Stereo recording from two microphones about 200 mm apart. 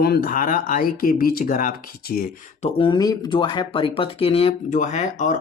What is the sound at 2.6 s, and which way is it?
Speech, 25° left (ahead or behind).